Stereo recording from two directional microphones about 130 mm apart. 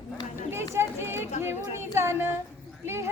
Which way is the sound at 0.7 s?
20° right (ahead or behind).